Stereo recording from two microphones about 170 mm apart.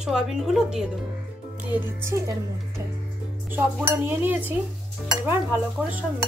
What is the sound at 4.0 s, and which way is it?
A woman's voice, 10° right (ahead or behind).